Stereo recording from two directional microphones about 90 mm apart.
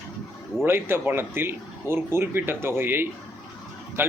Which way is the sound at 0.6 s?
25° right (ahead or behind).